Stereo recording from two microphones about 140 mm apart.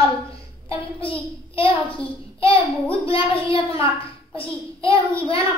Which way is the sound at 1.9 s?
40° left (ahead or behind).